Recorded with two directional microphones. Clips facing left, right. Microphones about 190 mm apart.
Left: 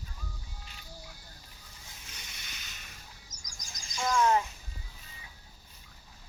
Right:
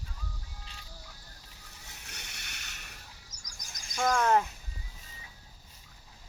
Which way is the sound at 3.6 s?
60° right (ahead or behind).